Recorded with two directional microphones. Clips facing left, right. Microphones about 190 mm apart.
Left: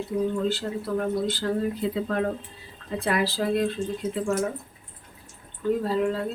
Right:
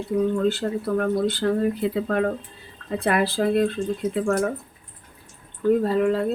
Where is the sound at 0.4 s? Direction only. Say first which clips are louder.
Right 4 dB; 55° right (ahead or behind).